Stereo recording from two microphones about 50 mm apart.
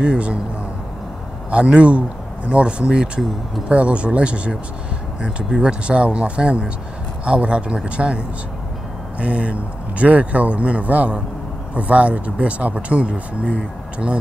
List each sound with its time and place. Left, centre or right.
0.0 s speech: right
1.5 s speech: right
9.2 s speech: right